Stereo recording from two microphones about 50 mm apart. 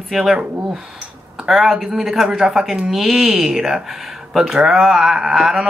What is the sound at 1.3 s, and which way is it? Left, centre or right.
Speech, centre.